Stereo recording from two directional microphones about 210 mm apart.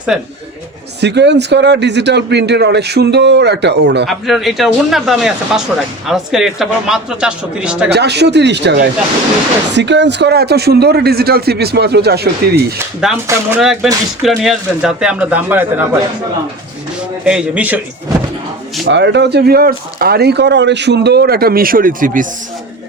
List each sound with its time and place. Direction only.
0.1 s speech: centre (ahead or behind)
1.0 s speech: 55° right (ahead or behind)
4.0 s speech: centre (ahead or behind)
7.9 s speech: 55° right (ahead or behind)
13.0 s speech: 5° right (ahead or behind)
17.2 s a man's voice: 5° right (ahead or behind)
18.9 s speech: 55° right (ahead or behind); by 22.3 s 40° right (ahead or behind)